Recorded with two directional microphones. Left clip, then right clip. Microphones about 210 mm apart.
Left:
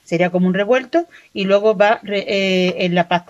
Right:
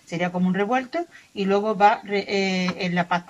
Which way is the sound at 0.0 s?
50° left (ahead or behind).